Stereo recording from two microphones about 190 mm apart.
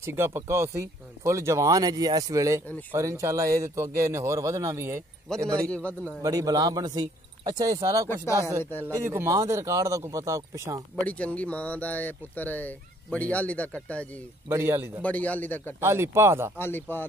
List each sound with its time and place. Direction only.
0.0 s speech: 15° right (ahead or behind)
5.7 s speech: 5° left (ahead or behind)
6.2 s speech: 20° right (ahead or behind)
11.1 s speech: 5° left (ahead or behind)
14.5 s speech: 15° right (ahead or behind)
15.0 s speech: 5° left (ahead or behind)
15.8 s speech: 15° right (ahead or behind)
16.5 s speech: 10° left (ahead or behind)